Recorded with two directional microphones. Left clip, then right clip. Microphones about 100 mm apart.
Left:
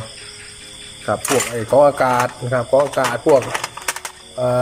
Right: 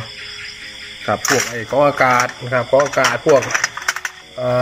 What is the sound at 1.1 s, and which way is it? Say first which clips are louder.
Speech: right 1 dB; 20° right (ahead or behind).